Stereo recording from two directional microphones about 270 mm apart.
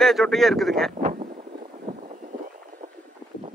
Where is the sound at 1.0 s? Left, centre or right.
Right.